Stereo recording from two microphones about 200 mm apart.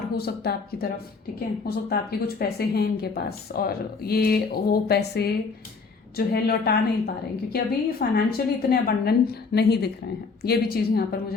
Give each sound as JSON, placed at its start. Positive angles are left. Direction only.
{"t": 0.2, "sound": "speech", "side_deg": 50}